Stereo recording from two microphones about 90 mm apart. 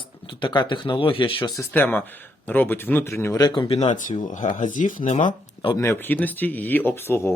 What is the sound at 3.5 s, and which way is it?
Speech, 75° left (ahead or behind).